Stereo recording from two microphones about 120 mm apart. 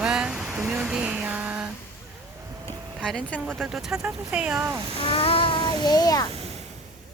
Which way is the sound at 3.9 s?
30° right (ahead or behind).